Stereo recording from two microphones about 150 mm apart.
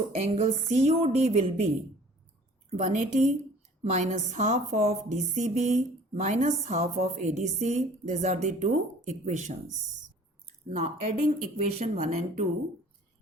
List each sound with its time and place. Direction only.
0.2 s speech: 45° right (ahead or behind)
10.7 s speech: 45° right (ahead or behind)